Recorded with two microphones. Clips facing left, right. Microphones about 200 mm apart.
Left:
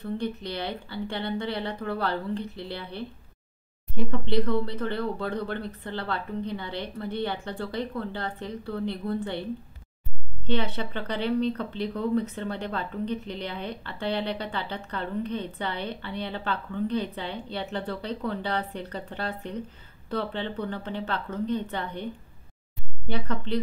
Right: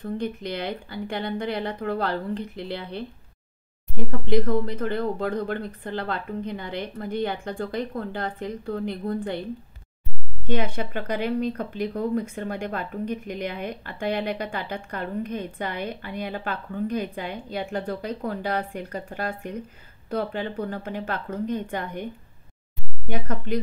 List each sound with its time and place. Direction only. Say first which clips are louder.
0.0 s speech: right 2 dB; 15° right (ahead or behind)
10.4 s speech: right 2 dB; 10° right (ahead or behind)